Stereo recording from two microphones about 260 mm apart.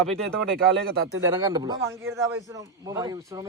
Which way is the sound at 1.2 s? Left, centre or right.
Centre.